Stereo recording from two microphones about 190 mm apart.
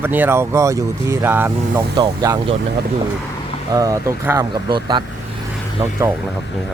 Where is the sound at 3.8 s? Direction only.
15° right (ahead or behind).